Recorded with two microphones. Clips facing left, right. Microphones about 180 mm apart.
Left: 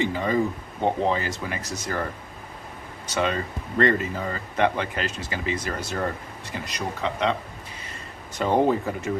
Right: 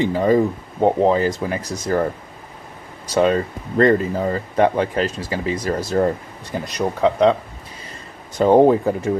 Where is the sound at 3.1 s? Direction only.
40° right (ahead or behind).